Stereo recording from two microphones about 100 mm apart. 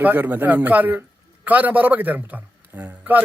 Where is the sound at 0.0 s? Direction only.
15° right (ahead or behind).